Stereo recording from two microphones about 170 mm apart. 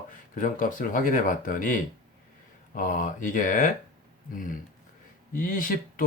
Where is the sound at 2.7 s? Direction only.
55° left (ahead or behind).